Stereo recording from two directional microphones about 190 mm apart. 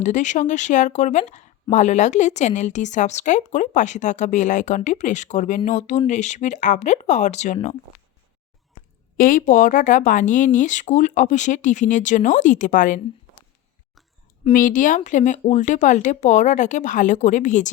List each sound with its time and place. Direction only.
0.0 s speech: 40° left (ahead or behind)
9.1 s speech: 45° left (ahead or behind)
14.4 s speech: 45° left (ahead or behind)